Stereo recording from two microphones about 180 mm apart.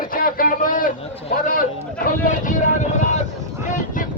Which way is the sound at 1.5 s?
50° left (ahead or behind).